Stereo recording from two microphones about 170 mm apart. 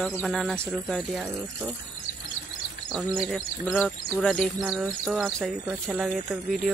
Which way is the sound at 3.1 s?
Centre (ahead or behind).